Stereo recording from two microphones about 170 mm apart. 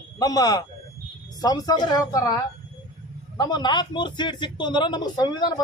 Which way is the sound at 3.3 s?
25° left (ahead or behind).